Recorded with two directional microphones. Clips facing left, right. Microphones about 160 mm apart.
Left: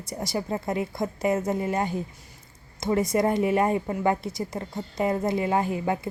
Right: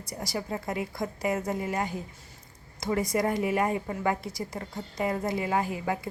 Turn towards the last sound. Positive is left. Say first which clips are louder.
# left 4 dB
turn(degrees=25)  # may be behind; listen again after turning